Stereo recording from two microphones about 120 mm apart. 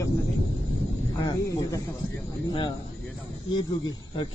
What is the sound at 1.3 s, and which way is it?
Speech, 30° left (ahead or behind).